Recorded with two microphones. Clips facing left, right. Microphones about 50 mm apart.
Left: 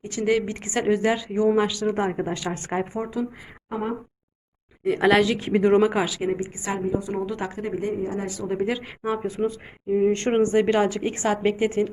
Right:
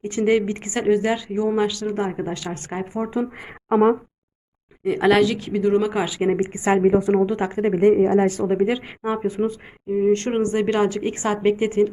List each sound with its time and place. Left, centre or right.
0.0 s a woman's voice: right
0.3 s speech: centre
3.0 s speech: centre
3.7 s speech: right
4.8 s speech: centre
5.4 s speech: left
6.4 s speech: right
6.8 s a woman's voice: right
7.3 s speech: right
7.6 s speech: right
8.4 s speech: centre
9.9 s speech: centre